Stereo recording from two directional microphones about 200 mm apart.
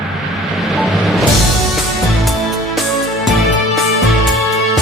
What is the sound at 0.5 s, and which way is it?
Vehicle, centre (ahead or behind).